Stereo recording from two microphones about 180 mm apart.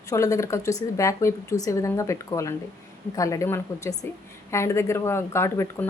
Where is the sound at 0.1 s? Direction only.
15° left (ahead or behind).